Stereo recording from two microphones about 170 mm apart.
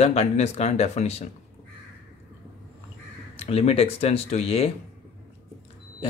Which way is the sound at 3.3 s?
35° left (ahead or behind).